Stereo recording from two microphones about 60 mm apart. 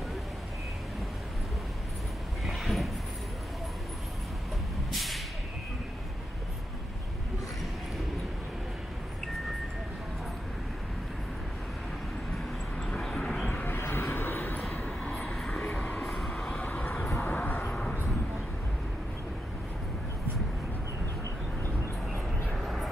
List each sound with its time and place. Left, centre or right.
2.4 s train: centre
4.9 s vehicle: centre
12.7 s vehicle: centre
13.7 s a sound: left
15.3 s vehicle: centre
15.7 s a sound: left
16.0 s train: centre
16.4 s vehicle: centre
17.2 s vehicle: left
17.6 s a sound: centre
22.5 s vehicle: centre